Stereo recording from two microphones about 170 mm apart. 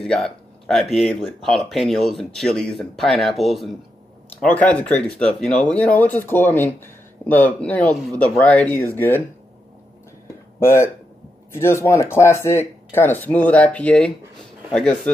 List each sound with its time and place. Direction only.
0.0 s speech: 5° left (ahead or behind)
10.6 s speech: 15° left (ahead or behind)